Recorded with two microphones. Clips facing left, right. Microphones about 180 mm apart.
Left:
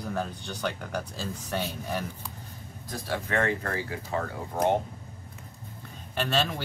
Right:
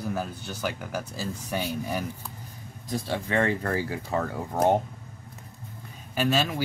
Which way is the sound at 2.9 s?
25° right (ahead or behind).